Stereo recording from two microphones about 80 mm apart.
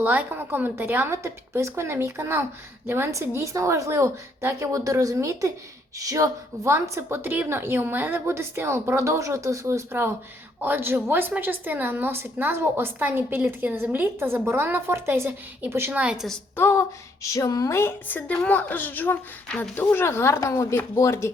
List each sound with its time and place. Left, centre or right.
0.0 s a woman's voice: right
3.1 s a woman's voice: right
15.9 s a woman's voice: centre
16.6 s a woman's voice: left
17.2 s a woman's voice: left
17.7 s speech: left
18.3 s a woman's voice: centre; by 21.3 s left